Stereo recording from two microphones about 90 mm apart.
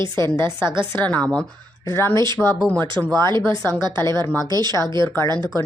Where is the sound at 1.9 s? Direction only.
30° left (ahead or behind).